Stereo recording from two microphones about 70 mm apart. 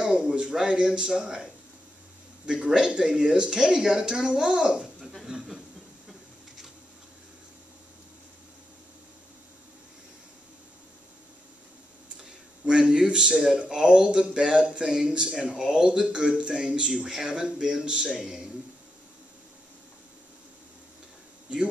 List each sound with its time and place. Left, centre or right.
0.0 s a child's voice: centre
12.6 s speech: centre